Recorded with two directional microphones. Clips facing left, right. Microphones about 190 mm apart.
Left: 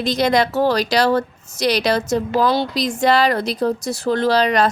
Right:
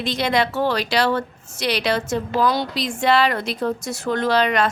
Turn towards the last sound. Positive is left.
turn(degrees=35)  # may be behind; listen again after turning